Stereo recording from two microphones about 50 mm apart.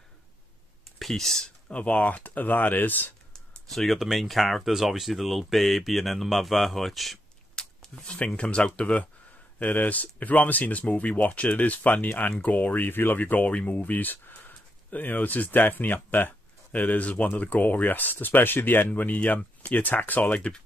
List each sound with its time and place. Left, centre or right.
0.9 s speech: centre
1.7 s speech: left
3.3 s speech: centre
7.5 s a sound: centre
8.4 s speech: left